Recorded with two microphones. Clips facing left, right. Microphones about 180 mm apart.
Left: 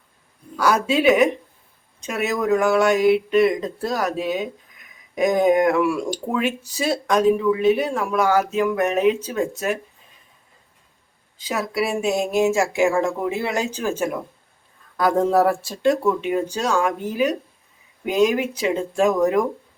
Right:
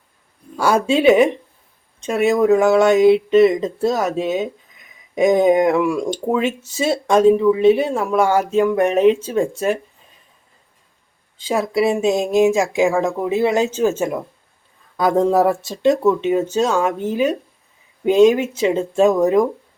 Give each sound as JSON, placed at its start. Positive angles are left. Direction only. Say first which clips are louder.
{"t": 0.5, "sound": "speech", "louder": "right 3 dB", "side_deg": -25}
{"t": 11.3, "sound": "speech", "louder": "right 5 dB", "side_deg": -25}